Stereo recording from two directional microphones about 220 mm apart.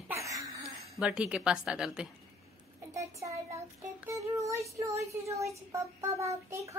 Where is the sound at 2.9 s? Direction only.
15° right (ahead or behind).